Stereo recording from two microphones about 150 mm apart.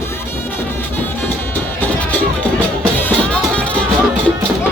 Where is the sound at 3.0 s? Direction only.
10° left (ahead or behind).